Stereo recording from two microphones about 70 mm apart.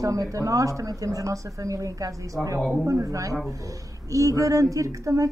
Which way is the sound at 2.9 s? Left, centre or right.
Right.